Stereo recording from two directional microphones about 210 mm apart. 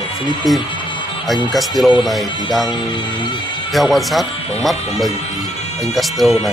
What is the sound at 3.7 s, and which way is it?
Speech, centre (ahead or behind).